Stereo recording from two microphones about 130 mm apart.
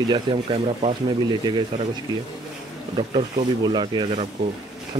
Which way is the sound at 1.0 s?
35° right (ahead or behind).